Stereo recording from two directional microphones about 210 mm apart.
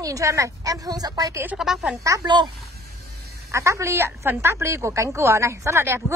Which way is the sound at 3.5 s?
15° right (ahead or behind).